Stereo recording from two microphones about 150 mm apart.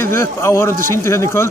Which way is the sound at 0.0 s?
15° left (ahead or behind).